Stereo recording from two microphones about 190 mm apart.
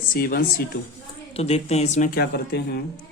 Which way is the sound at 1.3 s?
35° left (ahead or behind).